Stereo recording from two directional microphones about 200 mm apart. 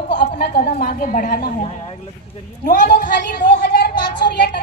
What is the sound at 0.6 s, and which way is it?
A woman's voice, 40° left (ahead or behind).